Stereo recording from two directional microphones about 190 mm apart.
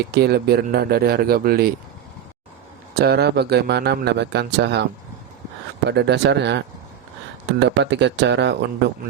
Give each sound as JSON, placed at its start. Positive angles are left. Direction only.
{"t": 0.0, "sound": "speech", "side_deg": -55}
{"t": 2.9, "sound": "speech", "side_deg": -55}
{"t": 5.9, "sound": "speech", "side_deg": -65}
{"t": 7.6, "sound": "speech", "side_deg": -65}